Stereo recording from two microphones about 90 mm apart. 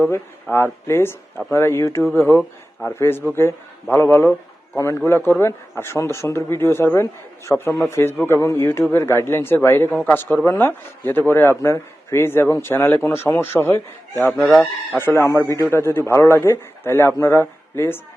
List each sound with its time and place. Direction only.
0.5 s a man's voice: 30° left (ahead or behind)
14.3 s chicken: 5° left (ahead or behind)
14.6 s speech: 25° left (ahead or behind)